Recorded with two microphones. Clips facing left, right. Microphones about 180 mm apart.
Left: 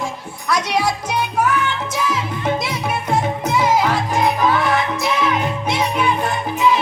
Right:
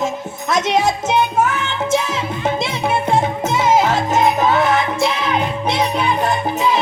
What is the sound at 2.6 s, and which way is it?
Music, 25° right (ahead or behind).